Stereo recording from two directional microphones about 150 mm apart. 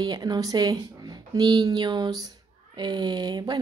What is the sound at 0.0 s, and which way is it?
A woman's voice, 25° right (ahead or behind).